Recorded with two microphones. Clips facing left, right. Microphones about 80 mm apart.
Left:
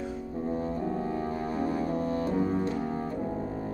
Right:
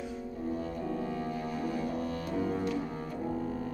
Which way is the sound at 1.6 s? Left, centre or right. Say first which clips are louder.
Left 5 dB; left.